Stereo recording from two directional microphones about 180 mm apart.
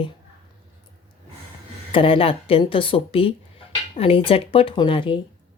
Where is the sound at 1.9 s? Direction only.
30° left (ahead or behind).